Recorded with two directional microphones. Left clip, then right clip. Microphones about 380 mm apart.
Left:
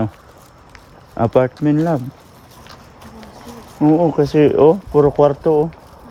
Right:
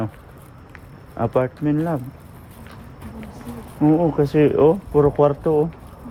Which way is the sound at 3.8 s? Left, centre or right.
Left.